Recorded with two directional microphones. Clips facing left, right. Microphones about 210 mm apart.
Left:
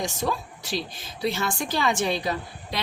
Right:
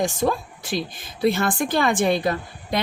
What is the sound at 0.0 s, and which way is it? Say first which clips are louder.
A woman's voice: right 6 dB; 50° right (ahead or behind).